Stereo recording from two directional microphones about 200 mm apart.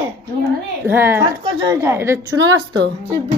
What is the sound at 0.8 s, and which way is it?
Speech, 10° right (ahead or behind).